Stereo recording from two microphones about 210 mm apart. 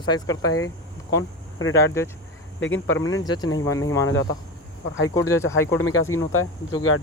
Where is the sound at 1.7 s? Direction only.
15° left (ahead or behind).